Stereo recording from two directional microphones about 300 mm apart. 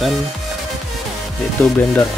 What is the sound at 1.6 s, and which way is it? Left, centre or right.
Speech, centre.